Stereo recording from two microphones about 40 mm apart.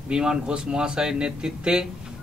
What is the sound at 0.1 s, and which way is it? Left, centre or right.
A man's voice, right.